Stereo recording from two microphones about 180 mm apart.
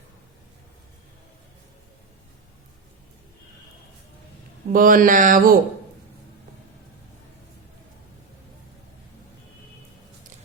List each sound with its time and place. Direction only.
4.7 s speech: 50° right (ahead or behind)